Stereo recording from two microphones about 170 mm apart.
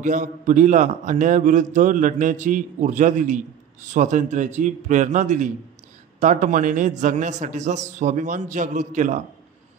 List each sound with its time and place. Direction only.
0.0 s a man's voice: 50° right (ahead or behind)